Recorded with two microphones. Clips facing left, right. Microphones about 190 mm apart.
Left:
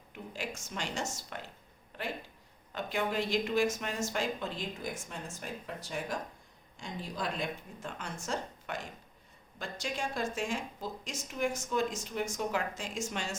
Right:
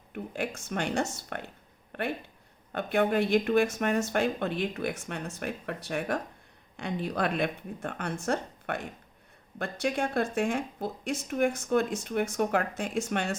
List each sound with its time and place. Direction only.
0.1 s speech: 60° right (ahead or behind)
1.9 s a sound: 60° right (ahead or behind)
2.7 s speech: 60° right (ahead or behind)